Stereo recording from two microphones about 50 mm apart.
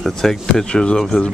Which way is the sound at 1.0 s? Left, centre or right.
Centre.